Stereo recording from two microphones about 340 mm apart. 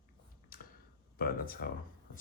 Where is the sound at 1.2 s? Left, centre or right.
Left.